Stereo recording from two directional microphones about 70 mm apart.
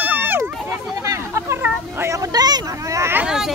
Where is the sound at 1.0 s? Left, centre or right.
Right.